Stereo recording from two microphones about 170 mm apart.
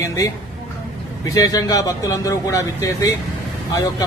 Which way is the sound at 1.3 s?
20° left (ahead or behind).